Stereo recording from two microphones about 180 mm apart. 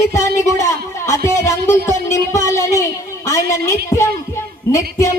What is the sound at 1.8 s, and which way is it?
A man's voice, 15° left (ahead or behind).